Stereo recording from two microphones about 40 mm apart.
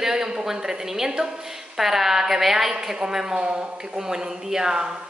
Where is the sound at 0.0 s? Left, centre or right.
Centre.